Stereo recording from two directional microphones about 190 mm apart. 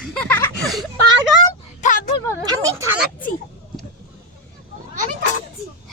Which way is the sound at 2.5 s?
15° right (ahead or behind).